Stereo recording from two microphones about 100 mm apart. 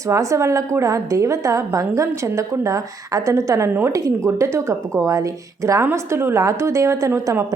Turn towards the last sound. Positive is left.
turn(degrees=-35)  # may be behind; listen again after turning